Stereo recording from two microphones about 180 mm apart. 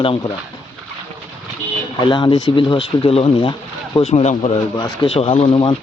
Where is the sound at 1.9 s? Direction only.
25° left (ahead or behind).